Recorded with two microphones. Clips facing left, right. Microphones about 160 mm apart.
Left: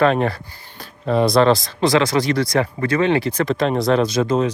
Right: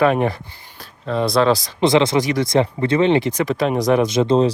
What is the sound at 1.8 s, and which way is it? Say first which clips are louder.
Speech: right 2 dB; 25° right (ahead or behind).